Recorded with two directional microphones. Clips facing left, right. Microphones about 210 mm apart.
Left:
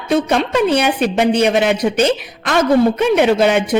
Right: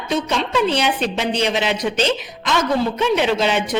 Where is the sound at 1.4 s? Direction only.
55° left (ahead or behind).